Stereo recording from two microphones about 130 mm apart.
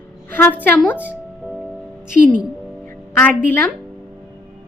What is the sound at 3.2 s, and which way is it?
Speech, 15° left (ahead or behind).